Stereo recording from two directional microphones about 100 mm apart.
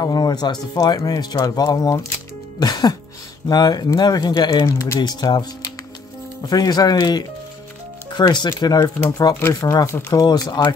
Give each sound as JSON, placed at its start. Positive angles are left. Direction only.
{"t": 0.0, "sound": "speech", "side_deg": 40}
{"t": 4.6, "sound": "speech", "side_deg": 30}
{"t": 5.0, "sound": "speech", "side_deg": 45}
{"t": 10.1, "sound": "speech", "side_deg": 40}